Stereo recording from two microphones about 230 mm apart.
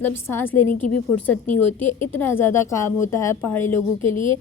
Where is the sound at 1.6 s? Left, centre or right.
Left.